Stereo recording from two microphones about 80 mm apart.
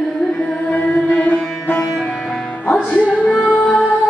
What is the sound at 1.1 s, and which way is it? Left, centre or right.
Music, centre.